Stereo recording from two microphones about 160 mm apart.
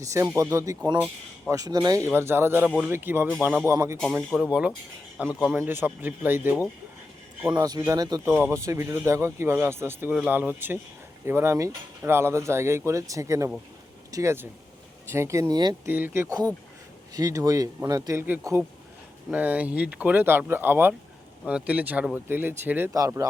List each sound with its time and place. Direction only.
0.0 s speech: 20° right (ahead or behind)
3.7 s a man's voice: 15° right (ahead or behind)
7.5 s speech: 25° right (ahead or behind)
15.9 s speech: 10° right (ahead or behind)